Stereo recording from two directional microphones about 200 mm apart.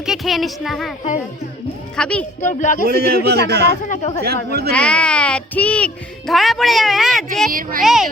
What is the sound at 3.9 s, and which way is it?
Speech, 35° left (ahead or behind).